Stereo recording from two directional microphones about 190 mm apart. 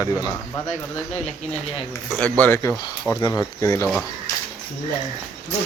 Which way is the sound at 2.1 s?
5° left (ahead or behind).